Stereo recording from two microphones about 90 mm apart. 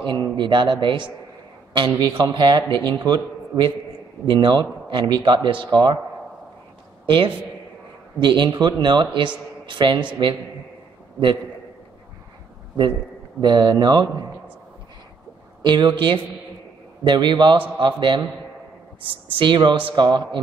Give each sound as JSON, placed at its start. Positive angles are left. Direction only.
{"t": 0.0, "sound": "a man's voice", "side_deg": -60}
{"t": 7.1, "sound": "a man's voice", "side_deg": -70}
{"t": 13.4, "sound": "a man's voice", "side_deg": -55}
{"t": 15.6, "sound": "a man's voice", "side_deg": -60}
{"t": 19.2, "sound": "a man's voice", "side_deg": -70}